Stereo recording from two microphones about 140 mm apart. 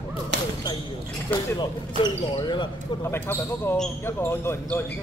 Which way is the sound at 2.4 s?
35° left (ahead or behind).